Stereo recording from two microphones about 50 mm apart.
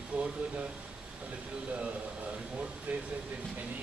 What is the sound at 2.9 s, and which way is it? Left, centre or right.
Speech, right.